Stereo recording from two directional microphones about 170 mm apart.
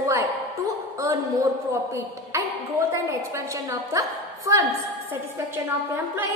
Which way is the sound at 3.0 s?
20° right (ahead or behind).